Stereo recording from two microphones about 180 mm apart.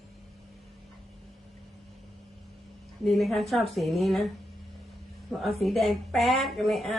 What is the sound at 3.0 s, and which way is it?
Speech, centre (ahead or behind).